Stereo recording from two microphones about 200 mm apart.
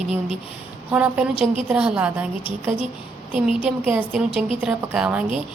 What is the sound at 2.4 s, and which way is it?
Speech, 25° left (ahead or behind).